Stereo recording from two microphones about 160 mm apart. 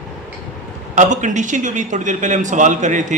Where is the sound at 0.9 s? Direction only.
50° right (ahead or behind).